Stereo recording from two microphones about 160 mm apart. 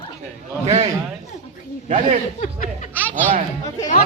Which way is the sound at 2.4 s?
55° left (ahead or behind).